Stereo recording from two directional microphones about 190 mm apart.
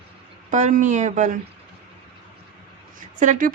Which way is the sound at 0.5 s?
40° right (ahead or behind).